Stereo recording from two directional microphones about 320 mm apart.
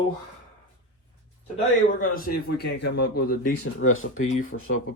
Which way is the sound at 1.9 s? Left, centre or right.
Left.